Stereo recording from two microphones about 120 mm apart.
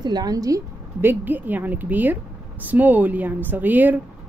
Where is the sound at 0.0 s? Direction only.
35° right (ahead or behind).